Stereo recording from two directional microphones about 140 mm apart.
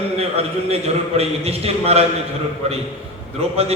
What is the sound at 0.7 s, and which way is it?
A man's voice, 45° right (ahead or behind).